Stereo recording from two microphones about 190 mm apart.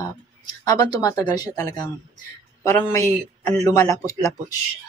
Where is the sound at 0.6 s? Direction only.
20° left (ahead or behind).